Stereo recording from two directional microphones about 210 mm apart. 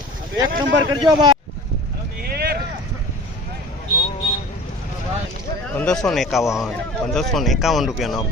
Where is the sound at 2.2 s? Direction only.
45° right (ahead or behind).